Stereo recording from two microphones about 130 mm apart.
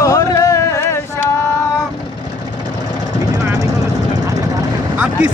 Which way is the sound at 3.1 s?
30° right (ahead or behind).